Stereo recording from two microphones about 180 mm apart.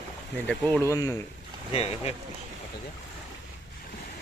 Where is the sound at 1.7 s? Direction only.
35° left (ahead or behind).